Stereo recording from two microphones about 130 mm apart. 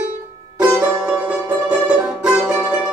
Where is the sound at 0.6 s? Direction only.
15° right (ahead or behind).